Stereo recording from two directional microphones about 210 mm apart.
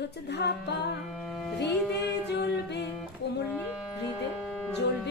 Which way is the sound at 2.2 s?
50° left (ahead or behind).